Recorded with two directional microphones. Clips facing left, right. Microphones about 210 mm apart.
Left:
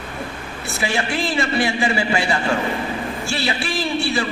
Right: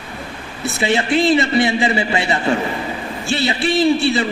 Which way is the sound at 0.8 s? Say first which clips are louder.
Right 6 dB; 20° right (ahead or behind).